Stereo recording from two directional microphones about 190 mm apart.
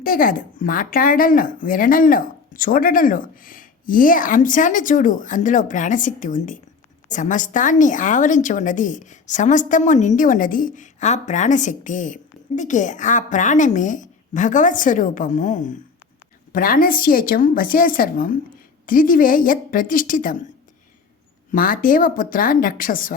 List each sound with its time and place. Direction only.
0.0 s a woman's voice: 50° left (ahead or behind)
21.5 s speech: 45° left (ahead or behind)